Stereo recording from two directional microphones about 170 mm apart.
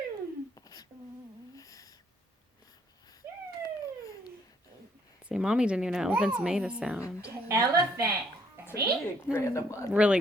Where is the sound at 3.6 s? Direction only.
25° left (ahead or behind).